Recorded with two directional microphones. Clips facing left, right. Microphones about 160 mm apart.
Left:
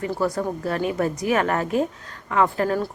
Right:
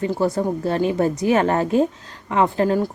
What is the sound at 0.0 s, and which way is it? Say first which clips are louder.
A woman's voice: right 3 dB; 25° right (ahead or behind).